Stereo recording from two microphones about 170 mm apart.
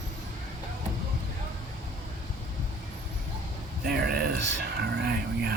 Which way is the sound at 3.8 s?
65° right (ahead or behind).